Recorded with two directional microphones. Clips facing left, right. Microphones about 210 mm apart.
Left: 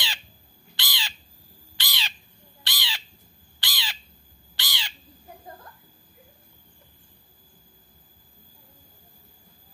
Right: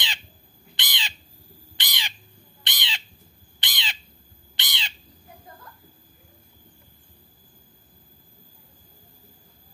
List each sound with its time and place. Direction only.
0.7 s crow: 20° right (ahead or behind)
1.8 s bird: 15° right (ahead or behind)
3.5 s crow: 20° right (ahead or behind)